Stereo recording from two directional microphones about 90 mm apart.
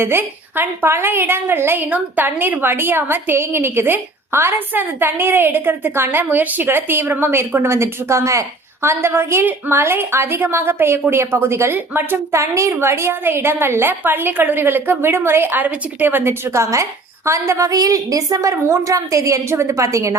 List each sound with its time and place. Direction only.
0.0 s a woman's voice: 25° right (ahead or behind)